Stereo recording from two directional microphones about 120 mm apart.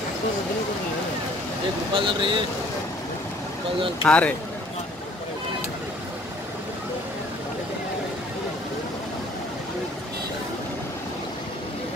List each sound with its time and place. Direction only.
2.0 s speech: 45° right (ahead or behind)
4.0 s speech: 10° left (ahead or behind)